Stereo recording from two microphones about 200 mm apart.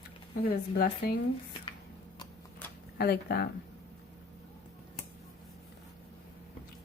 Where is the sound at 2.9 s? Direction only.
50° left (ahead or behind).